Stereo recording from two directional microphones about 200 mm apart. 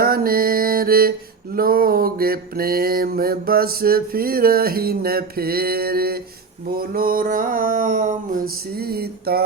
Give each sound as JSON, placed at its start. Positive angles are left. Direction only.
{"t": 0.0, "sound": "mantra", "side_deg": -45}
{"t": 8.8, "sound": "mantra", "side_deg": -50}